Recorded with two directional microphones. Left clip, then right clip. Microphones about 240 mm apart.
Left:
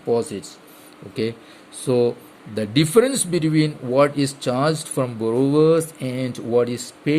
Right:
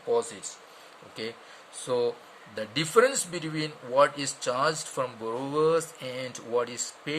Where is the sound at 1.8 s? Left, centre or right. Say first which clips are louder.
Left 8 dB; left.